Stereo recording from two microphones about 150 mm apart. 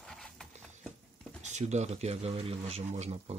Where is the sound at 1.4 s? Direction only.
50° right (ahead or behind).